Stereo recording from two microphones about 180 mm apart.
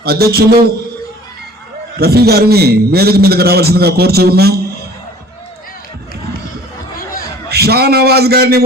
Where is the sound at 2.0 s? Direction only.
60° right (ahead or behind).